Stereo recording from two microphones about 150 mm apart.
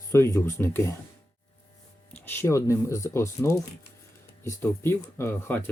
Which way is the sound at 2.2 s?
15° left (ahead or behind).